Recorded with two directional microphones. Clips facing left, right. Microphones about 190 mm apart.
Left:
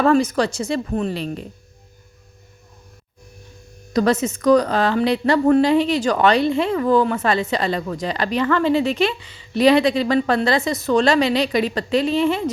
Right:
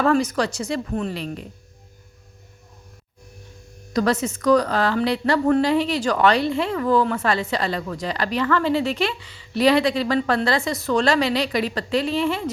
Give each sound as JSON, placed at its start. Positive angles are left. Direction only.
{"t": 0.0, "sound": "a woman's voice", "side_deg": 25}
{"t": 3.9, "sound": "a woman's voice", "side_deg": 20}